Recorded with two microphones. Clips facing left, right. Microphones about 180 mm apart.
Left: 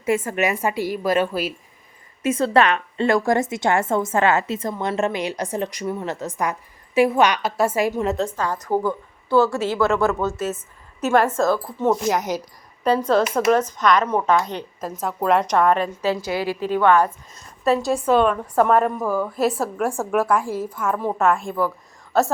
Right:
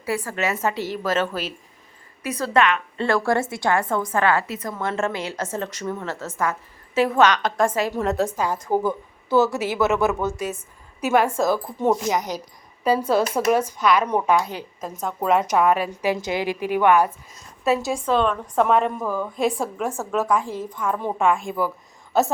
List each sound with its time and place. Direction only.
0.0 s a woman's voice: 20° left (ahead or behind)
2.2 s a woman's voice: 25° left (ahead or behind)
2.6 s a woman's voice: 35° left (ahead or behind)
3.0 s a woman's voice: 15° left (ahead or behind)
7.9 s a woman's voice: centre (ahead or behind)
11.0 s a woman's voice: 5° right (ahead or behind)
11.3 s a woman's voice: 15° right (ahead or behind)
12.0 s a woman's voice: 5° left (ahead or behind)
12.8 s a woman's voice: 10° right (ahead or behind)
17.7 s a woman's voice: centre (ahead or behind)